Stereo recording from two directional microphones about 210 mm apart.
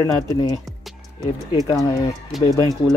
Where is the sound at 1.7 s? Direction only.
15° left (ahead or behind).